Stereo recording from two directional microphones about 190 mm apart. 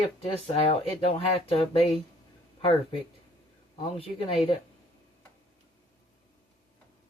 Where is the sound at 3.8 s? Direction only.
30° left (ahead or behind).